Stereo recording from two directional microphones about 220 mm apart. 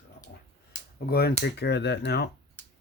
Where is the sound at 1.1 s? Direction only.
45° left (ahead or behind).